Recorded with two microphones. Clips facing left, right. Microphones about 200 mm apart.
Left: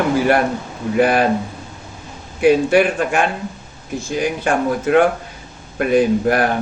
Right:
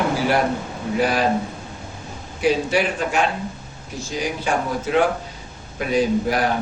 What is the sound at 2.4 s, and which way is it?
Speech, 55° left (ahead or behind).